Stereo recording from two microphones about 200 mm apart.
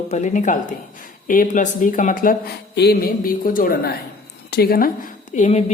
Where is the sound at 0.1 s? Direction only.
35° left (ahead or behind).